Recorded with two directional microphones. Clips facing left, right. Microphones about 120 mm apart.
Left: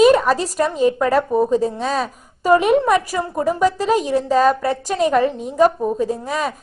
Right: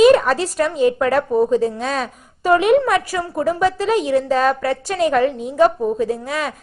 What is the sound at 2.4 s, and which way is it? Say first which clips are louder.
Speech: left 1 dB; 40° left (ahead or behind).